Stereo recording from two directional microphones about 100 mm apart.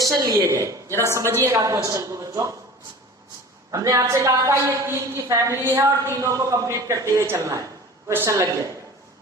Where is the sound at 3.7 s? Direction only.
35° right (ahead or behind).